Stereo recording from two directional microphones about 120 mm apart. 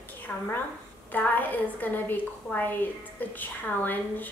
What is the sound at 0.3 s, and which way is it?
A woman's voice, 15° left (ahead or behind).